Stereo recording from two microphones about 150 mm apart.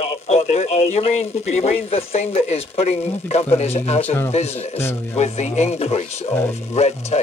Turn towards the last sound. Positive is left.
turn(degrees=45)  # may be behind; listen again after turning